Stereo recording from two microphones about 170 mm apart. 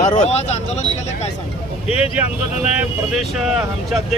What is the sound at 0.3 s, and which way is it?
Speech, 40° left (ahead or behind).